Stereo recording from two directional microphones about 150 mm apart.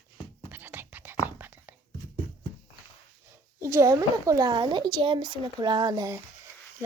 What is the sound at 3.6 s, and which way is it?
Speech, 20° right (ahead or behind).